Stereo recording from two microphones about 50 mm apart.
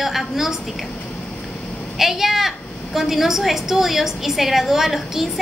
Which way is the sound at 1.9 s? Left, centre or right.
Centre.